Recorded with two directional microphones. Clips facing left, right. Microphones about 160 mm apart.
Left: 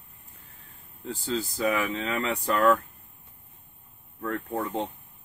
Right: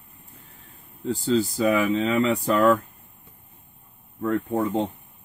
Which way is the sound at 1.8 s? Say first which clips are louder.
Right 7 dB; 20° right (ahead or behind).